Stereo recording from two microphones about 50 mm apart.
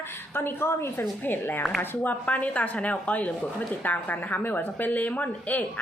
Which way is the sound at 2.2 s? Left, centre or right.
Left.